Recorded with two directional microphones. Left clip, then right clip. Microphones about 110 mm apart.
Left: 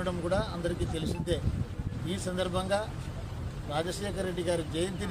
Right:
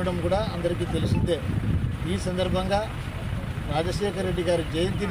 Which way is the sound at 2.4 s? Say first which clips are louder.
Right 5 dB; 15° right (ahead or behind).